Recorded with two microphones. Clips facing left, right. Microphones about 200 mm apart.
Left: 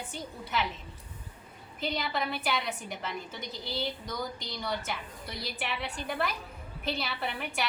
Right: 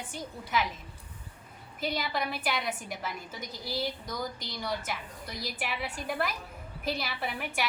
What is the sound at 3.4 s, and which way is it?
Speech, 25° left (ahead or behind).